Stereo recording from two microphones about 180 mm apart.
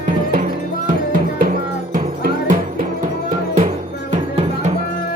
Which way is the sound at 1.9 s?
50° right (ahead or behind).